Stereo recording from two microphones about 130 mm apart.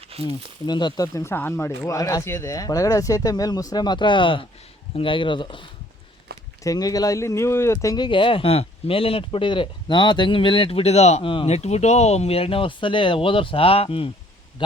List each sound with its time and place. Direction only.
0.3 s speech: 35° left (ahead or behind)
6.6 s speech: 25° left (ahead or behind); by 14.1 s 45° left (ahead or behind)